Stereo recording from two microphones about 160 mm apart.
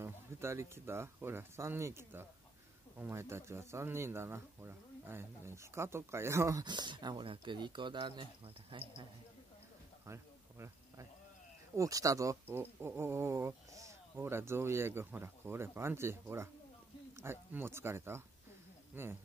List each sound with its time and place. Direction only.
0.0 s speech: 15° right (ahead or behind); by 9.0 s 30° right (ahead or behind)
10.0 s a sound: 15° right (ahead or behind)
11.7 s speech: 20° right (ahead or behind)